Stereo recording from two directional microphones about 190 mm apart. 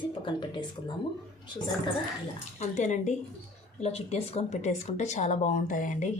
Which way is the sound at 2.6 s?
40° left (ahead or behind).